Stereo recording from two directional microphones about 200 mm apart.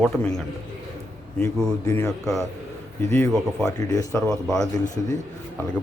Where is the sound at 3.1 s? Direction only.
5° left (ahead or behind).